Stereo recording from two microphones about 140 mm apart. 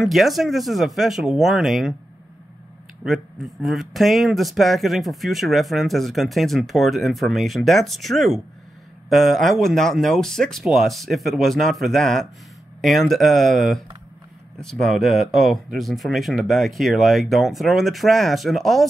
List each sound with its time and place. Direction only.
0.0 s speech: centre (ahead or behind)
3.0 s speech: centre (ahead or behind)